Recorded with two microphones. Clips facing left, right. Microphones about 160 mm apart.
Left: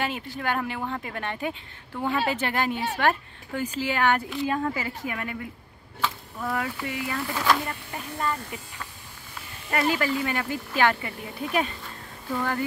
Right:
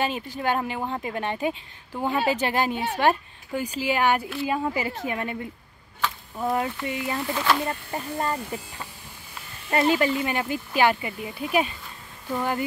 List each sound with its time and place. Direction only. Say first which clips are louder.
0.4 s a woman's voice: right 3 dB; 20° right (ahead or behind)
7.3 s speech: left 1 dB; 5° right (ahead or behind)
7.6 s a woman's voice: right 5 dB; 30° right (ahead or behind)